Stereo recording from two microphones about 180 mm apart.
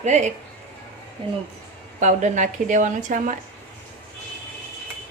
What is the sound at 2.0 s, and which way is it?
A woman's voice, 40° right (ahead or behind).